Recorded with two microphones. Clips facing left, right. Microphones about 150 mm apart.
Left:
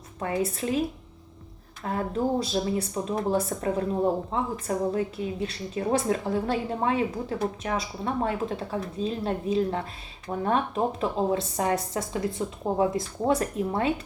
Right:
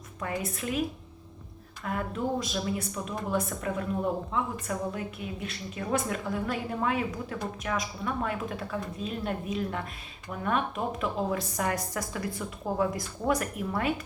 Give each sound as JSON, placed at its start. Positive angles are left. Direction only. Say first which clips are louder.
{"t": 0.2, "sound": "a woman's voice", "louder": "left 6 dB", "side_deg": 30}